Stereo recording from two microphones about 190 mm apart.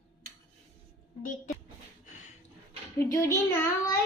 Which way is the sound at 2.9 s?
15° left (ahead or behind).